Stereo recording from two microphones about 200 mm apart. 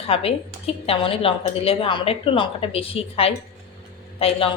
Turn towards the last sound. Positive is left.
turn(degrees=30)  # may be behind; listen again after turning